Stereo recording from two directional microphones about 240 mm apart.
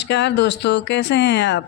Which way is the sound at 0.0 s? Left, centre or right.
Left.